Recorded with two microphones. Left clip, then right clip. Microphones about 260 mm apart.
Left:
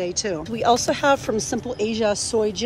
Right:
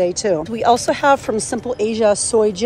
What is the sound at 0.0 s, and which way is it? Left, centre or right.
Speech, centre.